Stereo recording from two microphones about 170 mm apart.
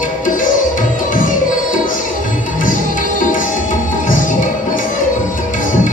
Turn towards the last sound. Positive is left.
turn(degrees=50)  # may be behind; listen again after turning